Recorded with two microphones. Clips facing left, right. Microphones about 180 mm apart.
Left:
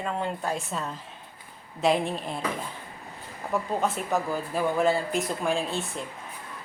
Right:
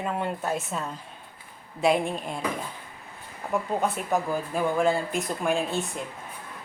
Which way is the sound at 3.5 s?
Centre (ahead or behind).